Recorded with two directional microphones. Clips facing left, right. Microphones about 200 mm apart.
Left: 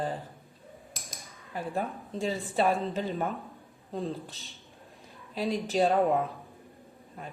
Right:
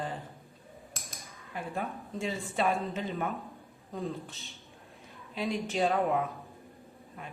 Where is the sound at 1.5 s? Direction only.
35° left (ahead or behind).